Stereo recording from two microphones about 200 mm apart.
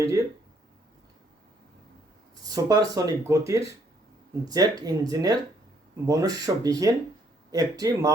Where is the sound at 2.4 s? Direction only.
20° right (ahead or behind).